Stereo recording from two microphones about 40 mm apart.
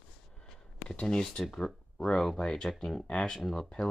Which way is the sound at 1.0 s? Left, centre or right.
Centre.